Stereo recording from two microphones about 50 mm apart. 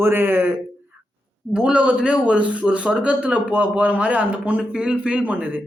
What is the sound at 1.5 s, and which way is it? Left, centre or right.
A man's voice, centre.